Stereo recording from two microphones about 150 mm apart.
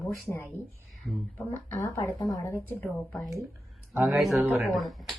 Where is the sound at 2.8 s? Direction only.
Centre (ahead or behind).